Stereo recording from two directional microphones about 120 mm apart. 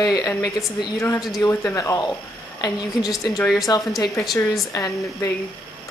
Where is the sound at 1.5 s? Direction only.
20° left (ahead or behind).